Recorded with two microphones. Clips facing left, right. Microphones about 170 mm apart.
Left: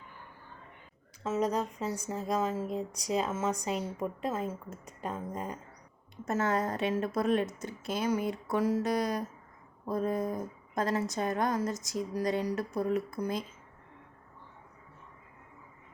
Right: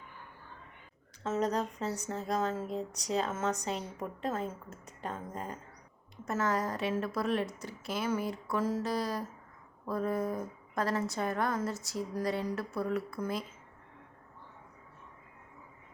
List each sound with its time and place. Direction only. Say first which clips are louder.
1.2 s speech: left 1 dB; 10° left (ahead or behind)
6.2 s a woman's voice: left 2 dB; 25° left (ahead or behind)